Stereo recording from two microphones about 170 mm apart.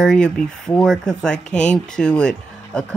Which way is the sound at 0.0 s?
5° left (ahead or behind).